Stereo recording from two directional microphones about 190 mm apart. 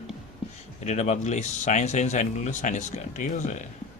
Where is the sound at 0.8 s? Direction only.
35° left (ahead or behind).